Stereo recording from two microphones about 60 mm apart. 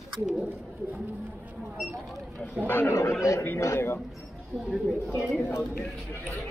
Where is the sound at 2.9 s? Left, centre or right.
Left.